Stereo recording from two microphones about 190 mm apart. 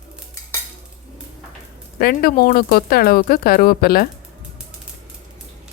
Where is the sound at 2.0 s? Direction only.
50° left (ahead or behind).